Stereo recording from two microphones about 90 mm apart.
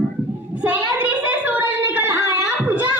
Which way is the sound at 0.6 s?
20° right (ahead or behind).